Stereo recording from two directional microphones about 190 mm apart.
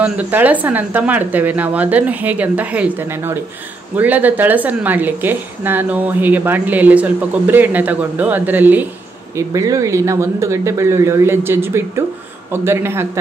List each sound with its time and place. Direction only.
0.0 s a woman's voice: 10° right (ahead or behind)